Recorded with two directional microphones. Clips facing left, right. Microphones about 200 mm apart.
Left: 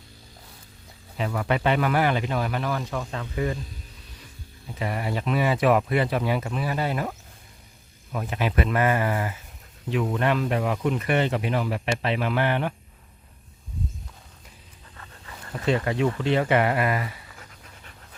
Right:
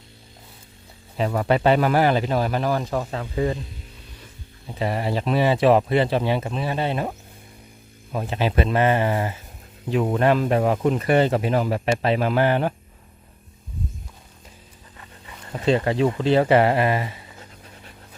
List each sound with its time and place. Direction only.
1.1 s speech: 35° right (ahead or behind)
4.8 s speech: 30° right (ahead or behind)
14.9 s speech: 20° right (ahead or behind)